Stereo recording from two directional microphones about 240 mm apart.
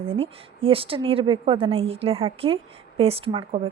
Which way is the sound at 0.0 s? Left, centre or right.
Right.